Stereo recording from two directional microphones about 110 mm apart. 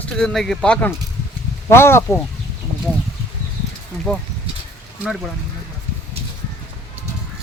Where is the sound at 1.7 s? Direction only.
20° left (ahead or behind).